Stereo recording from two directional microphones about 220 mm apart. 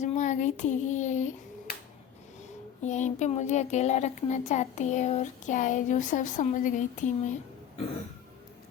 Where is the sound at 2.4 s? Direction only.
30° left (ahead or behind).